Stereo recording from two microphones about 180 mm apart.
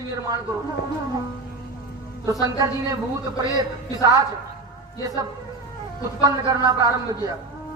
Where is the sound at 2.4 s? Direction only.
20° right (ahead or behind).